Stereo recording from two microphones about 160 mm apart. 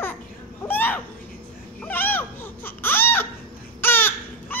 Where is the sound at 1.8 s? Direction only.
10° left (ahead or behind).